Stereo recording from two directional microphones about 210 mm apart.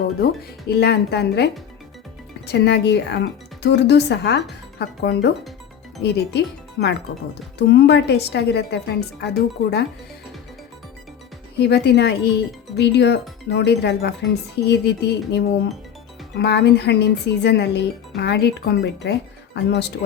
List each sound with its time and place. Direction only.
0.7 s speech: 50° left (ahead or behind)
2.5 s speech: 50° left (ahead or behind)
11.5 s speech: 50° left (ahead or behind)